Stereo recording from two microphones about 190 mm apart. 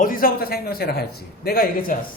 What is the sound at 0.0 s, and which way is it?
A man's voice, 50° left (ahead or behind).